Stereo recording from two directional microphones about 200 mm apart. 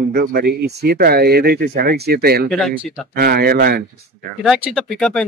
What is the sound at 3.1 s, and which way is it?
Speech, 50° right (ahead or behind).